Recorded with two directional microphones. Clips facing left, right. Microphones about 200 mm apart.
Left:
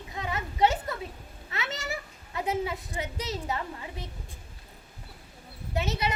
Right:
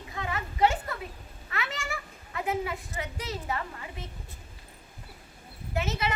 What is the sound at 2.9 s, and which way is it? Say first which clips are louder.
Speech: left 2 dB; 20° left (ahead or behind).